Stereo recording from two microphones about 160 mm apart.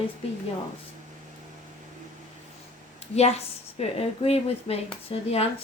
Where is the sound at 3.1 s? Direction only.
40° left (ahead or behind).